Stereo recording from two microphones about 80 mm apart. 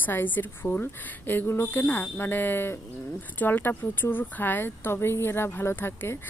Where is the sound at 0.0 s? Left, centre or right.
Left.